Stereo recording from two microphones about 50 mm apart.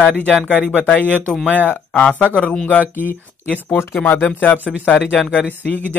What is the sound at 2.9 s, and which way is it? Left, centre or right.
Speech, left.